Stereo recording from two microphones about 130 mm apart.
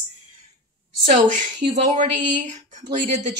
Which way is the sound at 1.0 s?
75° right (ahead or behind).